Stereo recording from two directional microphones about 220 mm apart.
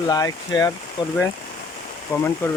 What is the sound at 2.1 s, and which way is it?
Speech, 10° left (ahead or behind).